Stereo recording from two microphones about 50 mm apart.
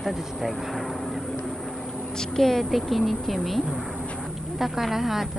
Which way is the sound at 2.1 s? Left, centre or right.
Centre.